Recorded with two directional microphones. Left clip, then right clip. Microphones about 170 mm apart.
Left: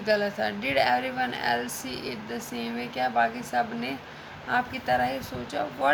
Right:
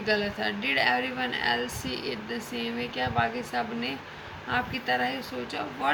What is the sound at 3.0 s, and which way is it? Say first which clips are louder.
Speech: left 3 dB; 55° left (ahead or behind).